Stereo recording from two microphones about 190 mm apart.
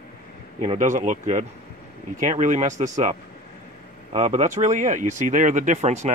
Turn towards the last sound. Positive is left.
turn(degrees=-40)  # may be behind; listen again after turning